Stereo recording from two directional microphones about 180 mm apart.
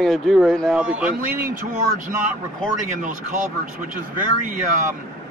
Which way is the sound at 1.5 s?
45° right (ahead or behind).